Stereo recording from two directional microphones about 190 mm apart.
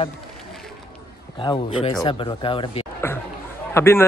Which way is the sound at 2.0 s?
25° left (ahead or behind).